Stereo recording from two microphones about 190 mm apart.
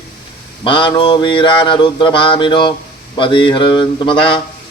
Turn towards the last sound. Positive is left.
turn(degrees=25)  # may be behind; listen again after turning